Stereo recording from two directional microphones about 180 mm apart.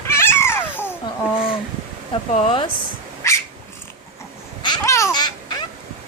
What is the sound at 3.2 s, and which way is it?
Cat, 15° left (ahead or behind).